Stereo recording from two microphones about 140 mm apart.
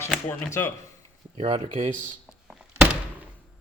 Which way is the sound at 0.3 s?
20° left (ahead or behind).